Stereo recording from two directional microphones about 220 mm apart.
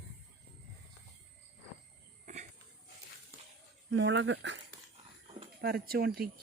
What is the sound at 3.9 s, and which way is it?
Speech, 55° right (ahead or behind).